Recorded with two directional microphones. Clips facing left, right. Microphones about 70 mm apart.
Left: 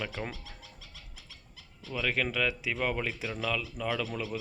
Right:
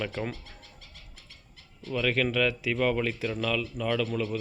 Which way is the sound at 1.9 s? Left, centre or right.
Centre.